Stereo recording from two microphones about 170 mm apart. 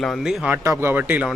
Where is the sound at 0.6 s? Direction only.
15° right (ahead or behind).